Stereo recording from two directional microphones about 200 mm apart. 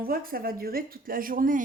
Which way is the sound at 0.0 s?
45° right (ahead or behind).